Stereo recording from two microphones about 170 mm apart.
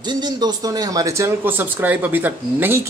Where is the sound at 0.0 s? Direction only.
25° right (ahead or behind).